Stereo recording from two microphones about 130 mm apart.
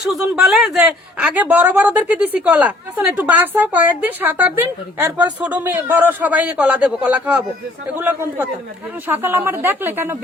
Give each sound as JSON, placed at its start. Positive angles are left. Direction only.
{"t": 0.0, "sound": "a woman's voice", "side_deg": -5}